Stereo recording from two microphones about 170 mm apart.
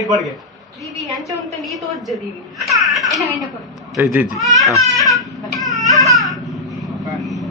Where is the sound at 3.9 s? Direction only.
10° right (ahead or behind).